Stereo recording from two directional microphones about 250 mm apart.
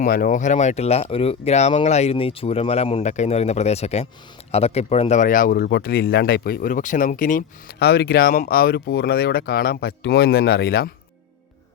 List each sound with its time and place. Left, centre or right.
0.0 s speech: left